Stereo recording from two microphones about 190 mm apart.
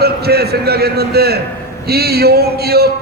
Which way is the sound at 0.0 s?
55° right (ahead or behind).